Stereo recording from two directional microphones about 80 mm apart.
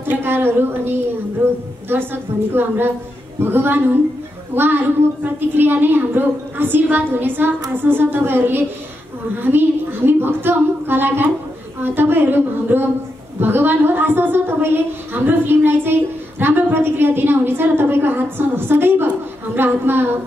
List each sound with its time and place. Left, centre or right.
0.0 s a woman's voice: right